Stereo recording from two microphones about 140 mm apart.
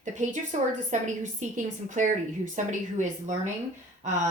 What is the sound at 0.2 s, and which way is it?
Speech, 60° right (ahead or behind).